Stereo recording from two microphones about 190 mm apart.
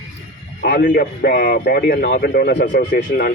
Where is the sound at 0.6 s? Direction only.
50° left (ahead or behind).